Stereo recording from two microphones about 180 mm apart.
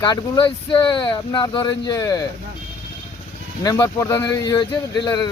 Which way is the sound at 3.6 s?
20° left (ahead or behind).